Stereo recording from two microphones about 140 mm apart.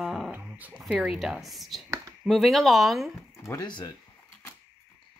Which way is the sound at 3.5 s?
30° left (ahead or behind).